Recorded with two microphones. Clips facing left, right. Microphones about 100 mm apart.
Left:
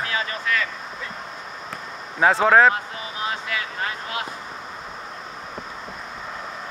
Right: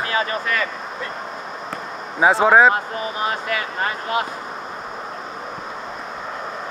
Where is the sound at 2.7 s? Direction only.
50° right (ahead or behind).